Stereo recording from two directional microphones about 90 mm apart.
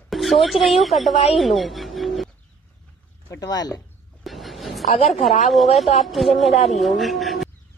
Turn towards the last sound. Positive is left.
turn(degrees=0)  # may be behind; listen again after turning